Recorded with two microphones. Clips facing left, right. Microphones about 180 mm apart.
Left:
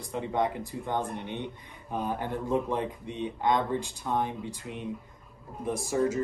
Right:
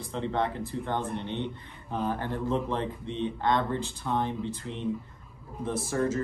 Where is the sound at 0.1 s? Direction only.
15° left (ahead or behind).